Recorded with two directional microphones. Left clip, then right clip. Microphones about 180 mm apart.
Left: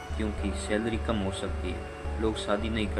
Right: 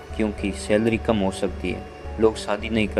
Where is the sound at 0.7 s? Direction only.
40° right (ahead or behind).